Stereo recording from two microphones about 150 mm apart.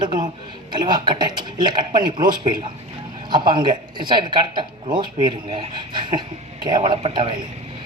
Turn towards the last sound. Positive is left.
turn(degrees=-35)  # may be behind; listen again after turning